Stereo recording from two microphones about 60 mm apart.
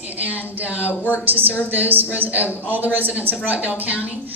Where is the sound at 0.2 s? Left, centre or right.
Right.